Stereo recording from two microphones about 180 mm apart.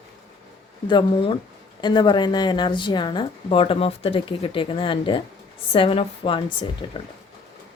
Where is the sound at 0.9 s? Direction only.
30° left (ahead or behind).